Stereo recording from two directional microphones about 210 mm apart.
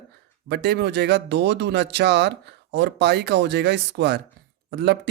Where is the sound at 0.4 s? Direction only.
50° right (ahead or behind).